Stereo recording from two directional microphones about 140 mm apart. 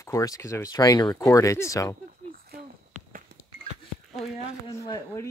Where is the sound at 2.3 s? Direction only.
90° right.